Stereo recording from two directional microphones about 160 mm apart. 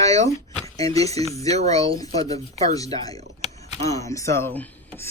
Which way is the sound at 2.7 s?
20° left (ahead or behind).